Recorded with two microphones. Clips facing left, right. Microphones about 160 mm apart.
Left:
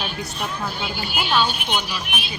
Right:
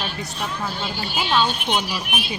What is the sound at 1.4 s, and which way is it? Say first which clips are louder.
Speech: right 1 dB; 25° right (ahead or behind).